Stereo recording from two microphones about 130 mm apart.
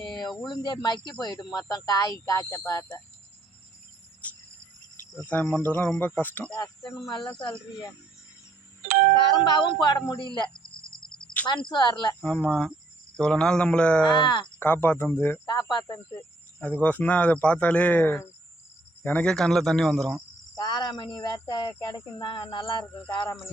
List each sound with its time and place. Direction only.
0.0 s speech: 35° left (ahead or behind)
4.2 s cricket: 10° left (ahead or behind)
5.1 s speech: 15° left (ahead or behind)
7.3 s speech: 40° left (ahead or behind)
8.9 s doorbell: 70° right (ahead or behind)
9.1 s speech: 35° left (ahead or behind)
10.6 s a sound: 5° left (ahead or behind)
11.4 s speech: 35° left (ahead or behind)
12.2 s speech: 10° left (ahead or behind)
14.1 s speech: 35° left (ahead or behind)
14.6 s speech: 15° left (ahead or behind)
15.4 s speech: 30° left (ahead or behind)
16.6 s speech: 10° left (ahead or behind)
20.6 s speech: 35° left (ahead or behind)